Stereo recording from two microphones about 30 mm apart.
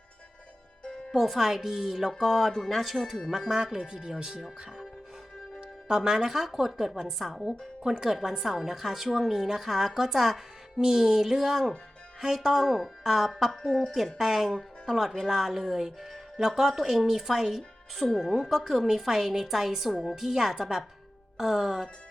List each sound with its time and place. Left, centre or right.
1.1 s a woman's voice: centre
2.1 s speech: centre
3.5 s speech: right
5.9 s speech: right
6.3 s a woman's voice: centre
8.1 s a woman's voice: centre
18.2 s a woman's voice: centre